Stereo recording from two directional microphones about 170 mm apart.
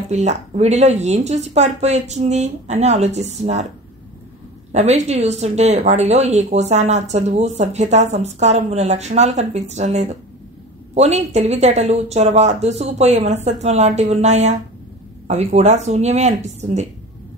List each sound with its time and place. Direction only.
0.1 s speech: 40° right (ahead or behind)
4.7 s speech: 40° right (ahead or behind)